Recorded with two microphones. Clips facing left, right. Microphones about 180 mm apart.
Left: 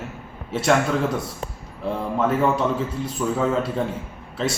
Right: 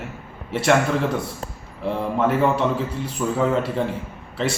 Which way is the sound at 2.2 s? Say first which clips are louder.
Right 1 dB; centre (ahead or behind).